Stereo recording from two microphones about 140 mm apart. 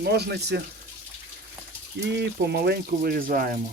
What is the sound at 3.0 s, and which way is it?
Speech, 90° right.